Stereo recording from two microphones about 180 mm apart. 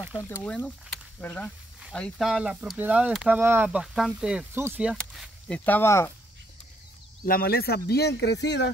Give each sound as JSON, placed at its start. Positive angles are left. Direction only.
{"t": 0.4, "sound": "speech", "side_deg": 5}
{"t": 4.9, "sound": "speech", "side_deg": 5}
{"t": 7.2, "sound": "speech", "side_deg": 55}